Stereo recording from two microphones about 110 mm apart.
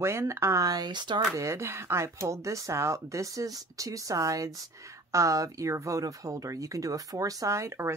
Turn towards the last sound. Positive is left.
turn(degrees=-25)  # may be behind; listen again after turning